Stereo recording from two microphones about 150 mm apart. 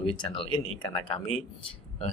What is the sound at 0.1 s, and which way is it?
Speech, 35° left (ahead or behind).